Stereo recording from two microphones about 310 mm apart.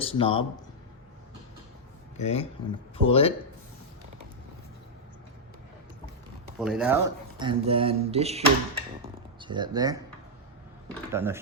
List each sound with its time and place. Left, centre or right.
0.0 s a man's voice: centre
2.1 s speech: centre
6.6 s speech: centre
11.1 s speech: centre